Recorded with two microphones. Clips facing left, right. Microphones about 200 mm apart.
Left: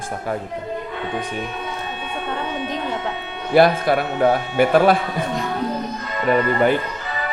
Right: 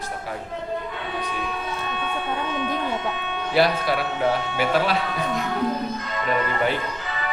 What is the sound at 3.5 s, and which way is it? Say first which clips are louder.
A man's voice: left 6 dB; 50° left (ahead or behind).